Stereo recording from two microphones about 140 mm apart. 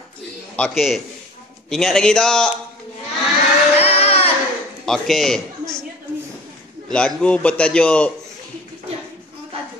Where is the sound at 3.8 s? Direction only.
45° left (ahead or behind).